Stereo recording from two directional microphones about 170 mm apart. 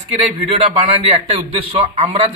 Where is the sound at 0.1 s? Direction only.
35° right (ahead or behind).